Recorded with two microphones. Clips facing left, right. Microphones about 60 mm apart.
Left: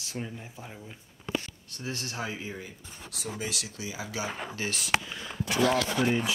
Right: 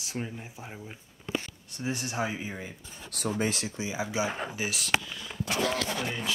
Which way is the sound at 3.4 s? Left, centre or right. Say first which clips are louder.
Right 5 dB; right.